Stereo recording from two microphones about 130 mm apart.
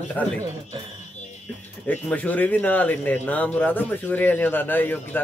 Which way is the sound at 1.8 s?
10° left (ahead or behind).